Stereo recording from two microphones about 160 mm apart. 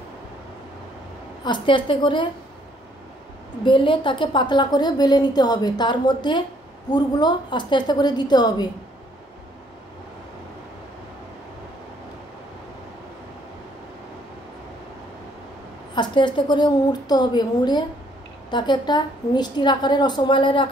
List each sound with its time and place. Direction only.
1.4 s a woman's voice: 30° left (ahead or behind)
3.6 s a woman's voice: 30° left (ahead or behind)
15.9 s a woman's voice: 30° left (ahead or behind)